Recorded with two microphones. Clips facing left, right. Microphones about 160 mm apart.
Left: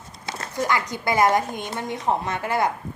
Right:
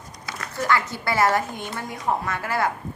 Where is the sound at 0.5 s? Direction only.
15° left (ahead or behind).